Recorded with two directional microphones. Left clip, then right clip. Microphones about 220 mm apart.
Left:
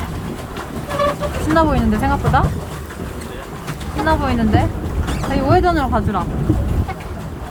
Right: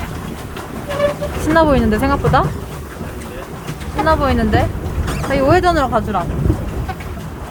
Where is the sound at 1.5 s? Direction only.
25° right (ahead or behind).